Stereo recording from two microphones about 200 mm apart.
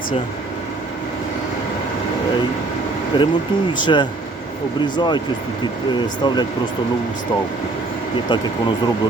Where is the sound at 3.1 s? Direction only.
25° left (ahead or behind).